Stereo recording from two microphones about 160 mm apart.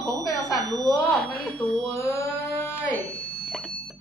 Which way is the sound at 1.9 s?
15° left (ahead or behind).